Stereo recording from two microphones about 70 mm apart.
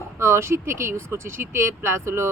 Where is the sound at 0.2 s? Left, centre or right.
Right.